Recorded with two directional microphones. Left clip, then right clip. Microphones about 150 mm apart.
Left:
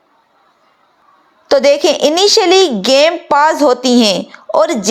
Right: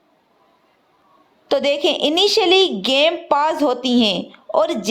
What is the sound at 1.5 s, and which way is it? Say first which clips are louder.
A woman's voice: left 8 dB; 40° left (ahead or behind).